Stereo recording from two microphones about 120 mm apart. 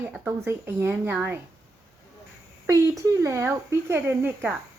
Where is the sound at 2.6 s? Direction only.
25° right (ahead or behind).